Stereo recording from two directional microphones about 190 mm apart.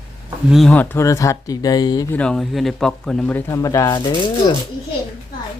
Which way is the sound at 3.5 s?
15° left (ahead or behind).